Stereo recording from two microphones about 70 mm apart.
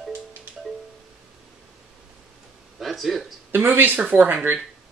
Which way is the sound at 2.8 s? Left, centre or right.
Centre.